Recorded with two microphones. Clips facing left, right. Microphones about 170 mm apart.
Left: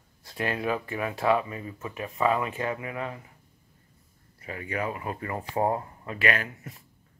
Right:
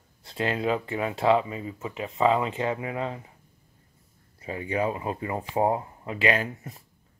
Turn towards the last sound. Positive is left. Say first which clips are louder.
# right 4 dB
turn(degrees=-30)  # may be behind; listen again after turning